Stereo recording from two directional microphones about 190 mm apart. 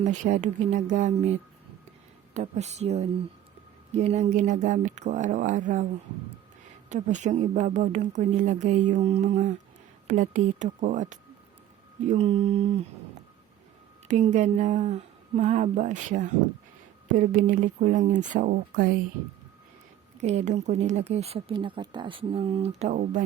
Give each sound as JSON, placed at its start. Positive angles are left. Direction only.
{"t": 0.0, "sound": "speech", "side_deg": -40}
{"t": 6.9, "sound": "speech", "side_deg": -40}
{"t": 14.1, "sound": "speech", "side_deg": -40}
{"t": 20.1, "sound": "speech", "side_deg": -40}